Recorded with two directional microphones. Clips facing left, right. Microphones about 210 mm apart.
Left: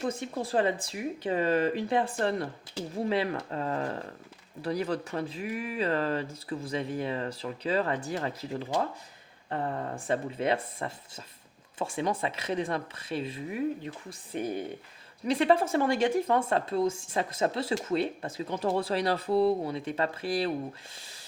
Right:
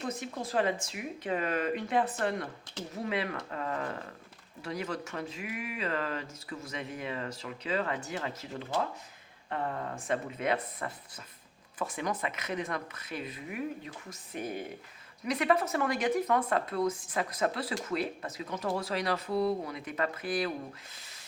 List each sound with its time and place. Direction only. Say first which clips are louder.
0.0 s speech: left 4 dB; 30° left (ahead or behind)
15.2 s speech: left 4 dB; 30° left (ahead or behind)